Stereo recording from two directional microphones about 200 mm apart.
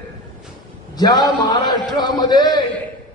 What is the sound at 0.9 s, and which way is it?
A man's voice, 20° left (ahead or behind).